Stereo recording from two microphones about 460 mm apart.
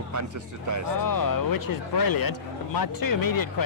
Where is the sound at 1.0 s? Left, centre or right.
Left.